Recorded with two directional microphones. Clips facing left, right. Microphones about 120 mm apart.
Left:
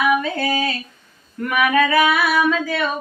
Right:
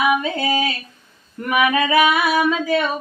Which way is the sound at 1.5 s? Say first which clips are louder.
Even; 15° right (ahead or behind).